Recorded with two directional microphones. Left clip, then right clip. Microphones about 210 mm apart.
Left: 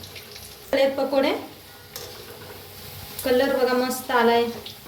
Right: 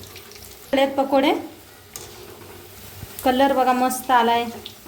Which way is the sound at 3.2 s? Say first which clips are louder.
Right 3 dB; 40° right (ahead or behind).